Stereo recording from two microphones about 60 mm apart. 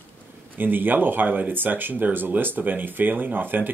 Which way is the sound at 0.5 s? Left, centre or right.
Right.